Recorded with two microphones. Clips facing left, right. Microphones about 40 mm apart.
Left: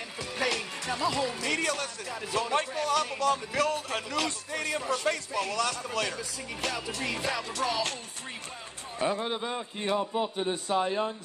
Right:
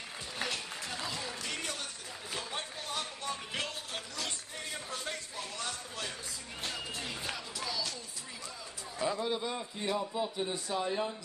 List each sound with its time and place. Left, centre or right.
0.4 s music: left
2.3 s speech: left
8.9 s a man's voice: left